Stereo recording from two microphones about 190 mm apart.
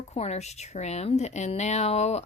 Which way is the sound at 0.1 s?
35° left (ahead or behind).